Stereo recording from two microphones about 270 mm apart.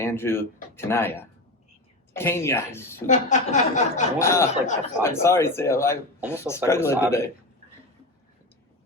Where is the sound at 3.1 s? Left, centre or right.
Left.